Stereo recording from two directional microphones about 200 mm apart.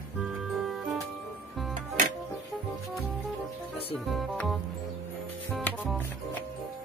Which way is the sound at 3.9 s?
Centre (ahead or behind).